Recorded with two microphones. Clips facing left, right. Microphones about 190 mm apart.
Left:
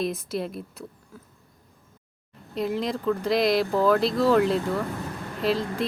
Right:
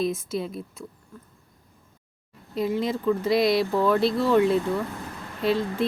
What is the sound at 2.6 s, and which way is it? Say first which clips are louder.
Speech: right 2 dB; centre (ahead or behind).